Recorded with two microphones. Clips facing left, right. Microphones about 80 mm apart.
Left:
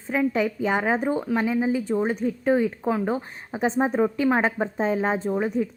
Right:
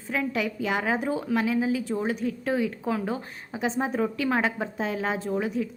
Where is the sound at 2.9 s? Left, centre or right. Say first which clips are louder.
Left 4 dB; left.